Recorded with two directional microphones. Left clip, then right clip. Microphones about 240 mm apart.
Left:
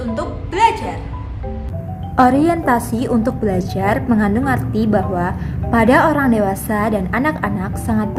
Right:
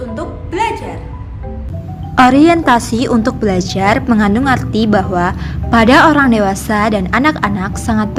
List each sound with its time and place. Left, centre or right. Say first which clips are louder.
0.1 s music: right 1 dB; centre
2.1 s a woman's voice: right 5 dB; right